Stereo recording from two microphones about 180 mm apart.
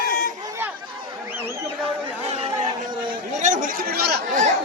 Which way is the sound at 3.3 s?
45° right (ahead or behind).